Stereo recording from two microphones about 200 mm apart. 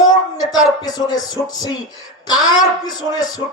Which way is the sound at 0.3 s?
20° left (ahead or behind).